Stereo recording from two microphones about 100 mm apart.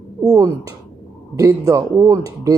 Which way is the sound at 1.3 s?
35° right (ahead or behind).